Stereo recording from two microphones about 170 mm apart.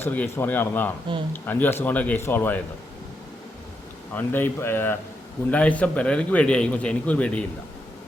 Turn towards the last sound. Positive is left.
turn(degrees=5)  # may be behind; listen again after turning